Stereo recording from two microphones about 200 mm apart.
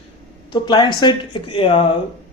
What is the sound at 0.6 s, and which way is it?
Speech, 25° left (ahead or behind).